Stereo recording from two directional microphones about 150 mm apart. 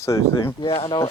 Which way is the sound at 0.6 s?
40° left (ahead or behind).